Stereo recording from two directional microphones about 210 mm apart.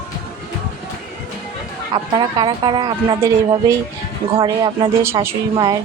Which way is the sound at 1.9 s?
20° right (ahead or behind).